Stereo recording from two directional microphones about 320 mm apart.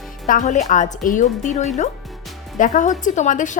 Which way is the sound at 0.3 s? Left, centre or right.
Left.